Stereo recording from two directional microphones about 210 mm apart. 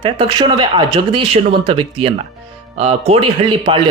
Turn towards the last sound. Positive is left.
turn(degrees=-25)  # may be behind; listen again after turning